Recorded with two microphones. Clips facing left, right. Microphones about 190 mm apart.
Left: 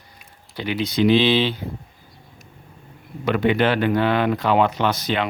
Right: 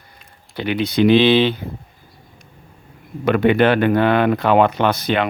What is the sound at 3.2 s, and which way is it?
Speech, 55° right (ahead or behind).